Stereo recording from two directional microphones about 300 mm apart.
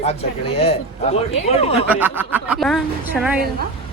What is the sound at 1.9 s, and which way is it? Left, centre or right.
Speech, centre.